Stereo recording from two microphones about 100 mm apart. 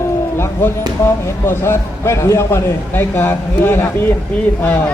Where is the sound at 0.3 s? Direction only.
25° left (ahead or behind).